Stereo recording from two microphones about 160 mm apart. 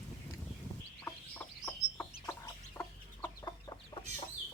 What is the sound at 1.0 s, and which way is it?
Chicken, 15° left (ahead or behind).